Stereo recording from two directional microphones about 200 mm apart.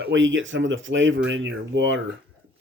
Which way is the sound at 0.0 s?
70° right (ahead or behind).